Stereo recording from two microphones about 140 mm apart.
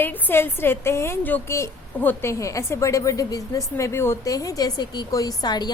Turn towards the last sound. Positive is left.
turn(degrees=30)  # may be behind; listen again after turning